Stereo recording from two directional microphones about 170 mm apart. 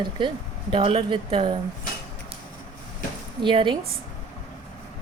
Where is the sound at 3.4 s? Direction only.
30° right (ahead or behind).